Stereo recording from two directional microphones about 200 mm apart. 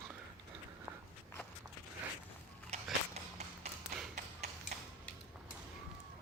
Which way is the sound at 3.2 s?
30° right (ahead or behind).